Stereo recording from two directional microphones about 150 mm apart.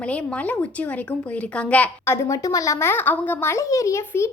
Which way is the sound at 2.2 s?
20° left (ahead or behind).